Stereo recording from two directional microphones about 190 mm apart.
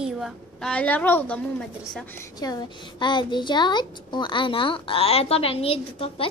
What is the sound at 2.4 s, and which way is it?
A woman's voice, 20° left (ahead or behind).